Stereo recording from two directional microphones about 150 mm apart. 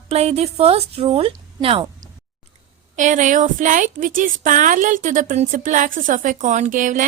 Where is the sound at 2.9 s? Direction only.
55° right (ahead or behind).